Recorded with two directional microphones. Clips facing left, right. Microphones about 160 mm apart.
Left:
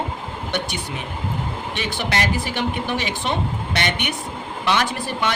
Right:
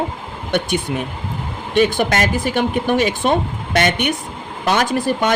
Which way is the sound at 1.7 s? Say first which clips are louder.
Right 11 dB; 50° right (ahead or behind).